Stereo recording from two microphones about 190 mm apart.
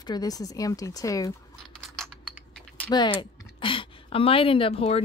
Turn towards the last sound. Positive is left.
turn(degrees=30)  # may be behind; listen again after turning